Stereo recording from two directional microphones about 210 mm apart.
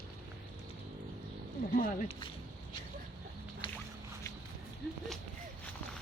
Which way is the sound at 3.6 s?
25° left (ahead or behind).